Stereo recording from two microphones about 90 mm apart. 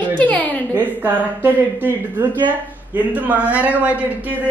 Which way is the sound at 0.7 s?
20° right (ahead or behind).